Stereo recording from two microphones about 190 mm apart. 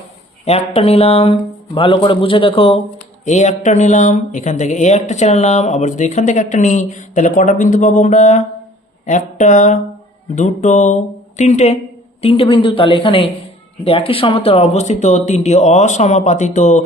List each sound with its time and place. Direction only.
0.4 s a woman's voice: 30° left (ahead or behind)